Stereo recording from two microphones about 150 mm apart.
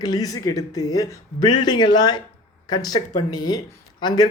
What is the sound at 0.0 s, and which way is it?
Speech, 25° left (ahead or behind).